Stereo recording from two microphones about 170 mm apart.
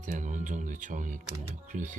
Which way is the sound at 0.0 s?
45° right (ahead or behind).